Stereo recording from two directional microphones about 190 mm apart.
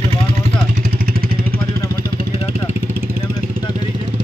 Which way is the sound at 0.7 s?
50° right (ahead or behind).